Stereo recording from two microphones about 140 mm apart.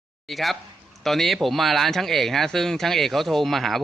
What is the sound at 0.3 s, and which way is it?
Speech, centre (ahead or behind).